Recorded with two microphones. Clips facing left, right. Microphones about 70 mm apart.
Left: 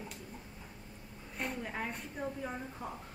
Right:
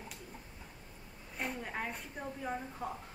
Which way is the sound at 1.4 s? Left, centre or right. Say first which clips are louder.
Even; centre.